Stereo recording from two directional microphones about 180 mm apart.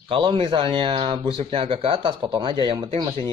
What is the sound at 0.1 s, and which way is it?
Speech, 25° right (ahead or behind).